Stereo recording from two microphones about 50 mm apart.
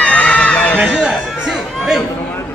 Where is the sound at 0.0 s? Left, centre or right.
Left.